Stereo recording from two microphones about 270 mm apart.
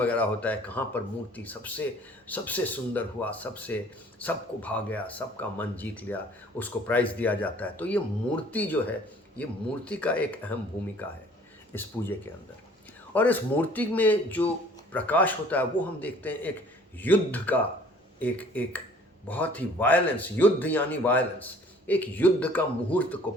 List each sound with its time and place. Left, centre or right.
0.0 s speech: centre
11.7 s speech: centre